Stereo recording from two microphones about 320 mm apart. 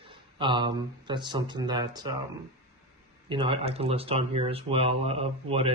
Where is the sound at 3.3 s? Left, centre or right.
Centre.